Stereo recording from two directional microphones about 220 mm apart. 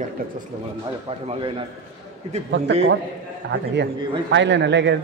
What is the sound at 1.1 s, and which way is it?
Speech, 25° right (ahead or behind).